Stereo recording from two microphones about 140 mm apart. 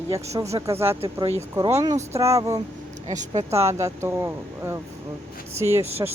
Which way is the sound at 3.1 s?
60° right (ahead or behind).